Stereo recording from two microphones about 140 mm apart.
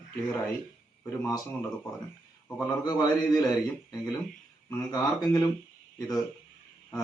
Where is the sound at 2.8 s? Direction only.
30° left (ahead or behind).